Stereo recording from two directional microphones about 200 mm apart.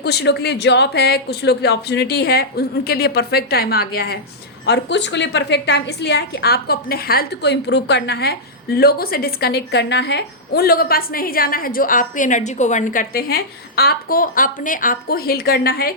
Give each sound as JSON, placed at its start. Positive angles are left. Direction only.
{"t": 0.0, "sound": "a woman's voice", "side_deg": 55}